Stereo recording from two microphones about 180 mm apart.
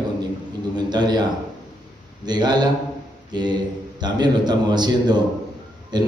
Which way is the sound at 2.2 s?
25° right (ahead or behind).